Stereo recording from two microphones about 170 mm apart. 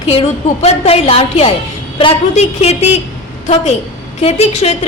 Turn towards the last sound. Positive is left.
turn(degrees=40)  # may be behind; listen again after turning